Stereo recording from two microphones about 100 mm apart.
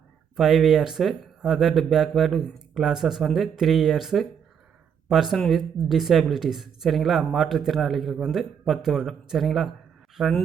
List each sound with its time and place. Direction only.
0.3 s speech: 5° right (ahead or behind)